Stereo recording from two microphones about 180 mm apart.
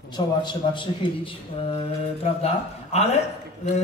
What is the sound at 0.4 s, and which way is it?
A man's voice, 25° left (ahead or behind).